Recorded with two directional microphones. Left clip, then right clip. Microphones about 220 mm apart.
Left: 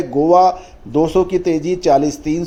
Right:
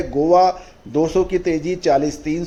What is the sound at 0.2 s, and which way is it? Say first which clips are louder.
Speech: left 3 dB; 25° left (ahead or behind).